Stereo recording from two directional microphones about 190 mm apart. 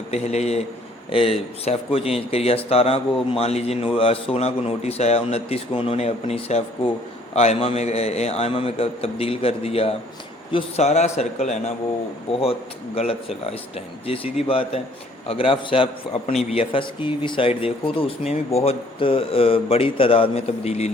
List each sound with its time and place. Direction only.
0.1 s a man's voice: 35° left (ahead or behind)